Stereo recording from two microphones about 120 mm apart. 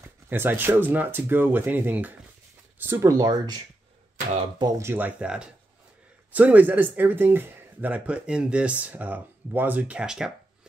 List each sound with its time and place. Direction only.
0.0 s speech: 15° right (ahead or behind)
3.1 s speech: 35° right (ahead or behind)
4.7 s speech: 20° right (ahead or behind)